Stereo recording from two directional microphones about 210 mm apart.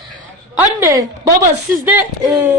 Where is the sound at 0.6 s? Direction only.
10° right (ahead or behind).